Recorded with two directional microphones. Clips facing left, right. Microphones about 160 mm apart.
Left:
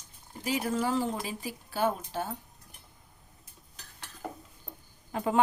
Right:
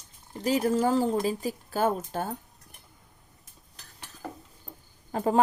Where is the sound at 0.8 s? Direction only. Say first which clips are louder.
Right 5 dB; 40° right (ahead or behind).